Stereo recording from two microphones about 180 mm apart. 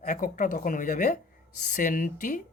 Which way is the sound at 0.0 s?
45° left (ahead or behind).